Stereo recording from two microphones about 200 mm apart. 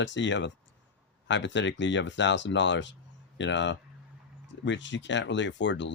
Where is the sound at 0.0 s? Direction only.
65° left (ahead or behind).